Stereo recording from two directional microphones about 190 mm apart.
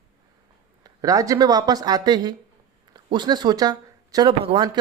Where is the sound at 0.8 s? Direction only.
20° right (ahead or behind).